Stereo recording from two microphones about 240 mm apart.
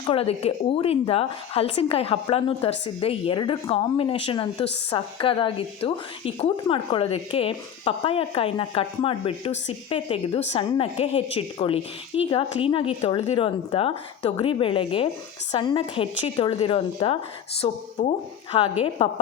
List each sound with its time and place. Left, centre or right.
0.0 s speech: left